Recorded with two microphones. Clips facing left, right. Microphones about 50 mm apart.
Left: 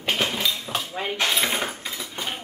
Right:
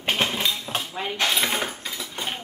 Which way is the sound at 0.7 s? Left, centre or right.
Centre.